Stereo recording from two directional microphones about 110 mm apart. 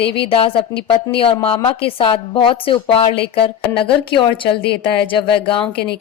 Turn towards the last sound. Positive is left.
turn(degrees=55)  # may be behind; listen again after turning